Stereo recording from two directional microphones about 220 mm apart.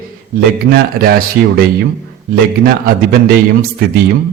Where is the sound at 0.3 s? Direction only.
45° right (ahead or behind).